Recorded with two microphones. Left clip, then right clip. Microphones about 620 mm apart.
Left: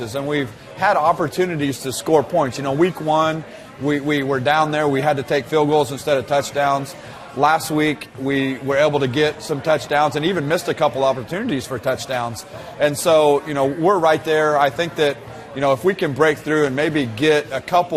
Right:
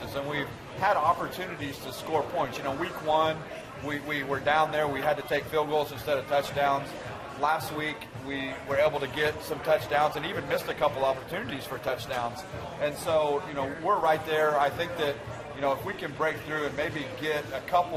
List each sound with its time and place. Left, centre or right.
0.1 s a man's voice: left
3.1 s a man's voice: left
12.8 s speech: left